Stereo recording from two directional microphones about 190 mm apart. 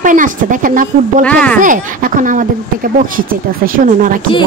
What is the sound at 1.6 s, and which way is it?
A woman's voice, 45° right (ahead or behind).